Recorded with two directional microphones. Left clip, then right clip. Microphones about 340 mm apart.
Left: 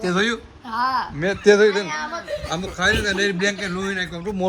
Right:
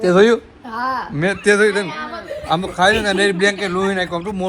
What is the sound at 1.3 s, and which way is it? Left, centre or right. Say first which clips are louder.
A man's voice: right 1 dB; centre.